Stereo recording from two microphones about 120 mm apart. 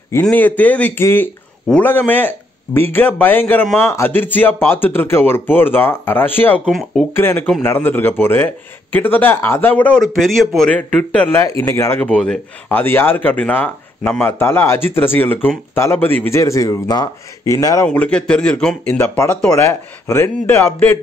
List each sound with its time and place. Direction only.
0.1 s speech: 15° left (ahead or behind)
6.7 s a man's voice: centre (ahead or behind)
7.2 s speech: 20° left (ahead or behind)
10.1 s a man's voice: centre (ahead or behind); by 12.1 s 20° left (ahead or behind)
12.1 s a man's voice: 5° left (ahead or behind)
12.6 s speech: 20° left (ahead or behind)
17.8 s speech: 10° left (ahead or behind)
18.9 s speech: 20° left (ahead or behind)